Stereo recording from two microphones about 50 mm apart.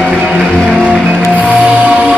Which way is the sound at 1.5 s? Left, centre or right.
Right.